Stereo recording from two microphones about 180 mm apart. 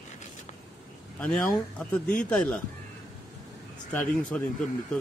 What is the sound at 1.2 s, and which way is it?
Speech, 5° left (ahead or behind).